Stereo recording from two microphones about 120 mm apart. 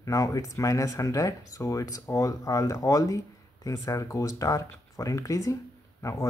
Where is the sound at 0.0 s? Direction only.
30° left (ahead or behind).